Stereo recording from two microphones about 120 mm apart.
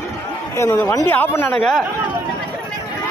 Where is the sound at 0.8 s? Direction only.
25° left (ahead or behind).